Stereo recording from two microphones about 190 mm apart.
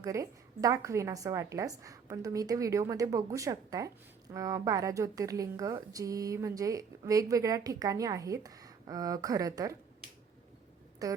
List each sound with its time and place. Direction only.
0.0 s speech: 15° right (ahead or behind)
11.0 s speech: 20° right (ahead or behind)